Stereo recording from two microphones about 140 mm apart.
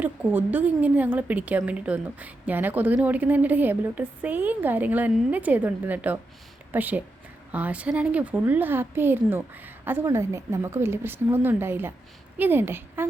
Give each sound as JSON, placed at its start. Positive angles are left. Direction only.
{"t": 0.0, "sound": "a woman's voice", "side_deg": -10}